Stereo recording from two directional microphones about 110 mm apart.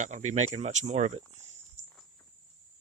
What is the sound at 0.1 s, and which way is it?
Speech, 90° right.